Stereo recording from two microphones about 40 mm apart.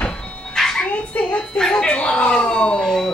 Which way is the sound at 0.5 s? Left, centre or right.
Centre.